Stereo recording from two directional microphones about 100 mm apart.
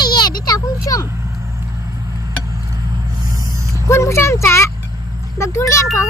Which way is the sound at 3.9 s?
30° left (ahead or behind).